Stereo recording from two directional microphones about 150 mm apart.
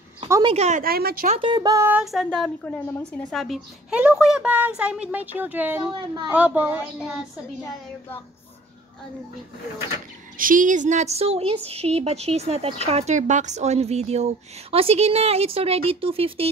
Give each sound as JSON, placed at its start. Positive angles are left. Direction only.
{"t": 0.4, "sound": "a woman's voice", "side_deg": -35}
{"t": 0.8, "sound": "speech", "side_deg": -90}
{"t": 1.4, "sound": "speech", "side_deg": -30}
{"t": 2.0, "sound": "a woman's voice", "side_deg": 0}
{"t": 5.9, "sound": "a woman's voice", "side_deg": -30}
{"t": 6.3, "sound": "speech", "side_deg": -10}
{"t": 10.3, "sound": "a woman's voice", "side_deg": -65}